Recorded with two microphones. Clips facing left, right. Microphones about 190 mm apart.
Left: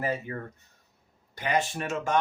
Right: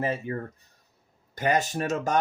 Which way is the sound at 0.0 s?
25° right (ahead or behind).